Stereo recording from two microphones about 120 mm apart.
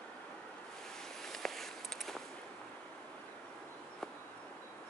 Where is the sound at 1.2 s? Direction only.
5° left (ahead or behind).